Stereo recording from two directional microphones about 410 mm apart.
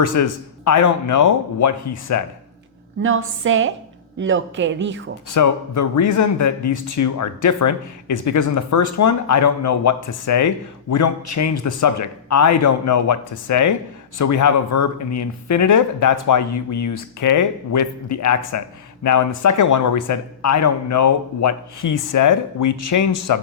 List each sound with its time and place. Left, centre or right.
0.0 s speech: left
3.4 s speech: right
5.3 s speech: left